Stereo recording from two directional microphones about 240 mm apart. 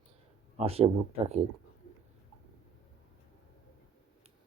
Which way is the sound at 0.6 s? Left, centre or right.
Right.